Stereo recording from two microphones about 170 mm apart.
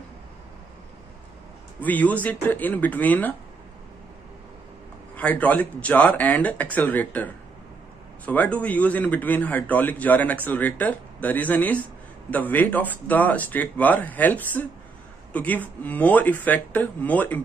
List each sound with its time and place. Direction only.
1.8 s a man's voice: 10° left (ahead or behind)
5.1 s a man's voice: 10° left (ahead or behind)